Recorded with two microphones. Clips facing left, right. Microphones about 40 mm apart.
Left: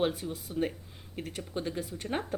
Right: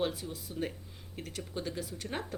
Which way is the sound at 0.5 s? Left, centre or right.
Centre.